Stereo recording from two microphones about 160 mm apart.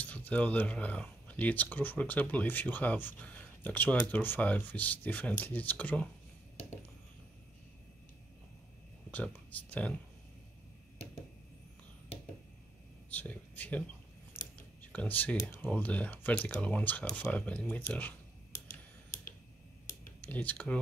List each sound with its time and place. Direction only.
0.0 s speech: 10° left (ahead or behind)
9.1 s speech: 10° left (ahead or behind)
13.1 s speech: 10° left (ahead or behind)
14.3 s scissors: 10° left (ahead or behind)
14.8 s speech: 10° left (ahead or behind)
18.7 s a sound: 55° left (ahead or behind)
20.2 s speech: 10° left (ahead or behind)